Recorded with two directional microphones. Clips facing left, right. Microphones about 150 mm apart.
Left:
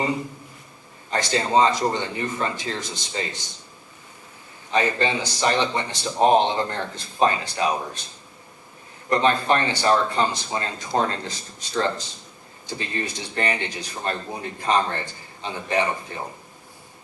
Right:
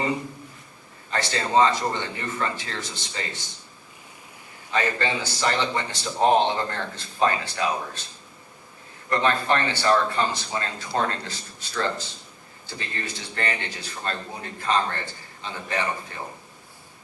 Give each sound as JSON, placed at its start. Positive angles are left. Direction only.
{"t": 1.1, "sound": "speech", "side_deg": 20}
{"t": 4.7, "sound": "speech", "side_deg": 20}
{"t": 9.0, "sound": "speech", "side_deg": 20}